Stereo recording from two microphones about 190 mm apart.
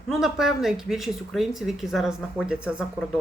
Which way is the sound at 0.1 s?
Centre (ahead or behind).